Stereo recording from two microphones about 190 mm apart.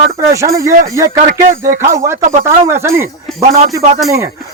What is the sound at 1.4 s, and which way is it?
Speech, 40° right (ahead or behind).